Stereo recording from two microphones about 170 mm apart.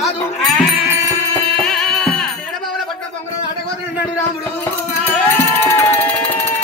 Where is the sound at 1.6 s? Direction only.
5° left (ahead or behind).